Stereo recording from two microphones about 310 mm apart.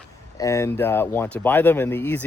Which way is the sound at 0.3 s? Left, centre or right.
Centre.